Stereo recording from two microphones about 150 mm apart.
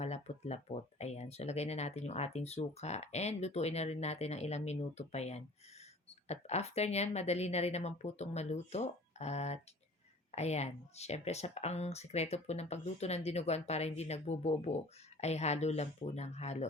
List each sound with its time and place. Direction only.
0.0 s speech: 45° left (ahead or behind)